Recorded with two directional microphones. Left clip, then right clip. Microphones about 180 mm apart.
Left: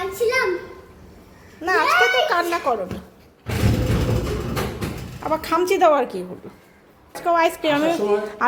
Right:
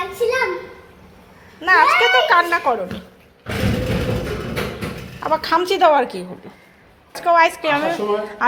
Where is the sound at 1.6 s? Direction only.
10° left (ahead or behind).